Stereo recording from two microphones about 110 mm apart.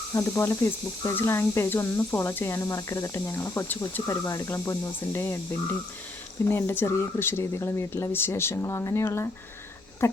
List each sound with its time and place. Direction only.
0.1 s speech: 25° left (ahead or behind)
6.4 s speech: 25° left (ahead or behind)